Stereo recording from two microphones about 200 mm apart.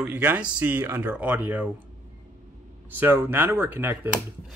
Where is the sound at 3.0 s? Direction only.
10° right (ahead or behind).